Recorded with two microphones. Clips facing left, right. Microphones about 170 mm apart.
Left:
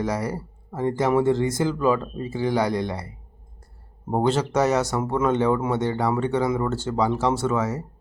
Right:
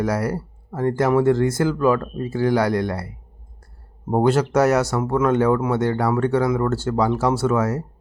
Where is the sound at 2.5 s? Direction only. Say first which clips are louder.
Right 3 dB; 5° right (ahead or behind).